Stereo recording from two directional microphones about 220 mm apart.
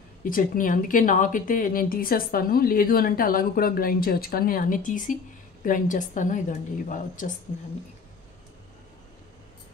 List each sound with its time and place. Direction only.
0.2 s speech: 40° left (ahead or behind)